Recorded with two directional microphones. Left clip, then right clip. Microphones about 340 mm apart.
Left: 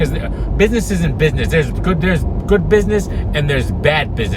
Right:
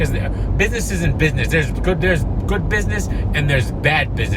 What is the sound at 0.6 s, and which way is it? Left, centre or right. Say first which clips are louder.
Speech: left 5 dB; centre.